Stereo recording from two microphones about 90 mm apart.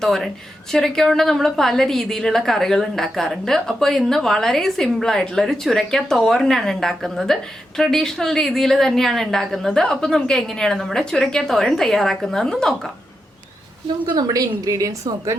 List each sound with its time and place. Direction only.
0.0 s a woman's voice: 5° left (ahead or behind)
14.1 s a woman's voice: 45° right (ahead or behind)